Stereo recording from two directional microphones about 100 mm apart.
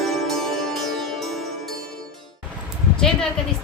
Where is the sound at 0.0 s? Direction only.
5° left (ahead or behind).